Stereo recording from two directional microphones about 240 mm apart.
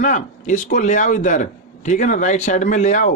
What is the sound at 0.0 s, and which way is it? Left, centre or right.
A man's voice, left.